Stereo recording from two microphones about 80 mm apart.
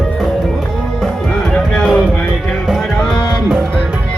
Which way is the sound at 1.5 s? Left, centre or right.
Centre.